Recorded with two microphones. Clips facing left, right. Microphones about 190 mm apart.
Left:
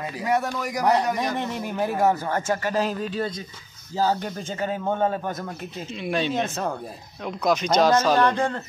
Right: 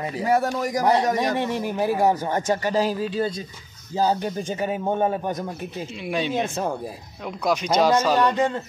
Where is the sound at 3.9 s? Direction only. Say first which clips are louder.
Right 2 dB; 15° right (ahead or behind).